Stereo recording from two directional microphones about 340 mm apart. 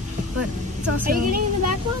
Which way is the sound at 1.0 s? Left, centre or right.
Right.